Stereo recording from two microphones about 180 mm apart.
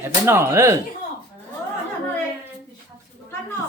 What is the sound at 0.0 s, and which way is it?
Speech, 15° right (ahead or behind).